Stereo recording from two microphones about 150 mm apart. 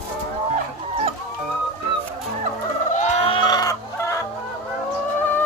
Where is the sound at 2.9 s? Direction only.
55° left (ahead or behind); by 4.2 s 20° left (ahead or behind).